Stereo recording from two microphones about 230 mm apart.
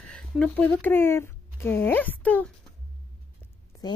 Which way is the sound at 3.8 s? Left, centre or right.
Centre.